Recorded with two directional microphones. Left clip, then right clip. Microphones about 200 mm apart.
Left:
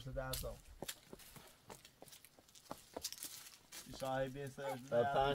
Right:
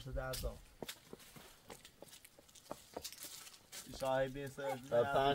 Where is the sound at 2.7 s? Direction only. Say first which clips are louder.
Even; 45° left (ahead or behind).